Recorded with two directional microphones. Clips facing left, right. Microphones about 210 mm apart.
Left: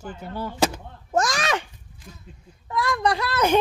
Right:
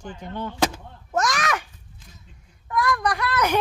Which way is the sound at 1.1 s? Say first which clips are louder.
Left 1 dB; 30° left (ahead or behind).